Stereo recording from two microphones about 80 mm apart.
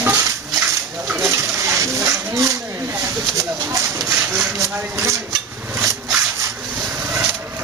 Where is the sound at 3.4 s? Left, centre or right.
Right.